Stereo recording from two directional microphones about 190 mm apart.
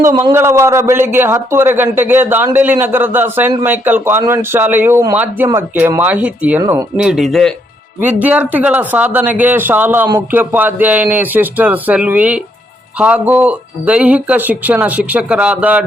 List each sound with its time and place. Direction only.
0.0 s speech: 15° right (ahead or behind)
6.9 s a man's voice: 5° right (ahead or behind)